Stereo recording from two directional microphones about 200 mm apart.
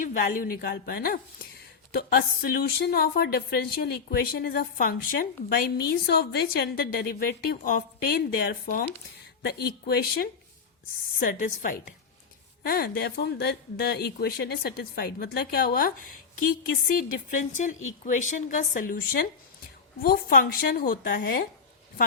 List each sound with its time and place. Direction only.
0.0 s a woman's voice: 45° left (ahead or behind)
21.2 s speech: 55° left (ahead or behind)